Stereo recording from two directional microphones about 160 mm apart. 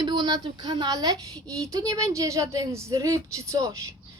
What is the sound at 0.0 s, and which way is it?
A child's voice, 25° right (ahead or behind).